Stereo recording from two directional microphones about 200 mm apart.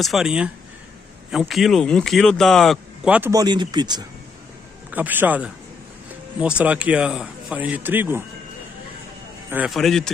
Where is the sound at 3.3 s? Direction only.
20° right (ahead or behind).